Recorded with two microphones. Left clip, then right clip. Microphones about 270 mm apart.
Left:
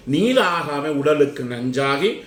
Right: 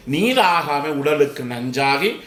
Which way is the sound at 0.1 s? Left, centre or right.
Centre.